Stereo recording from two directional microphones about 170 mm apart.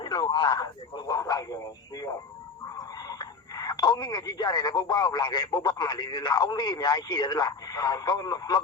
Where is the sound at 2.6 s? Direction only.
20° left (ahead or behind).